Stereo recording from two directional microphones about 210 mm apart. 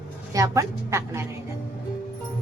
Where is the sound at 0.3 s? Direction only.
15° right (ahead or behind).